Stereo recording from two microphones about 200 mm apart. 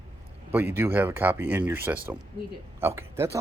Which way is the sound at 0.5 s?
10° right (ahead or behind).